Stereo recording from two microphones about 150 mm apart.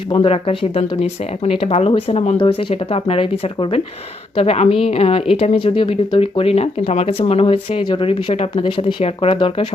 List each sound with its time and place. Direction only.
0.1 s speech: 35° left (ahead or behind)